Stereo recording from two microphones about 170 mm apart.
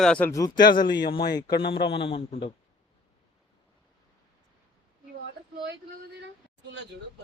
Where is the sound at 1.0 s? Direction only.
65° left (ahead or behind).